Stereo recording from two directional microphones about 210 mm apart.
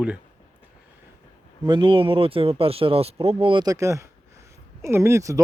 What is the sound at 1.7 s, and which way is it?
Speech, 25° right (ahead or behind).